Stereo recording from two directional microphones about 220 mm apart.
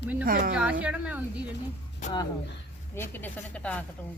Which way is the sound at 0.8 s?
5° right (ahead or behind).